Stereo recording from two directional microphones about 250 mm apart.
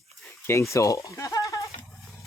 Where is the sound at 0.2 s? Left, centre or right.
Centre.